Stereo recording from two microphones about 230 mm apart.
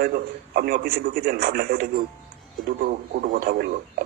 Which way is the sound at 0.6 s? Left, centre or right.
Right.